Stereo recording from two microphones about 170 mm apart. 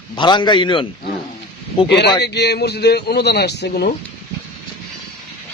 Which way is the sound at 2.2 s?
75° left (ahead or behind).